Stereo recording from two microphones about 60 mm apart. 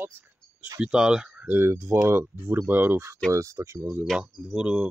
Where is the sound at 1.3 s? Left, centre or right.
Right.